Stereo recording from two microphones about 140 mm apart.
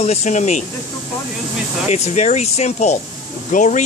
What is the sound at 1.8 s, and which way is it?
A man's voice, 55° left (ahead or behind).